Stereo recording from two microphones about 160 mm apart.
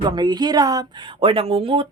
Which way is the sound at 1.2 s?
35° right (ahead or behind).